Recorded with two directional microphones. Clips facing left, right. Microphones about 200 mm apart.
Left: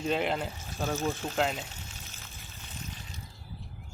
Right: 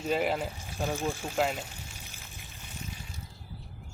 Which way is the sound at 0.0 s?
5° right (ahead or behind).